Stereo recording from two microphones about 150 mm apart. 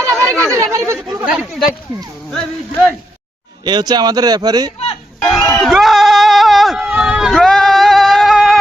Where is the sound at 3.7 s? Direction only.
30° right (ahead or behind).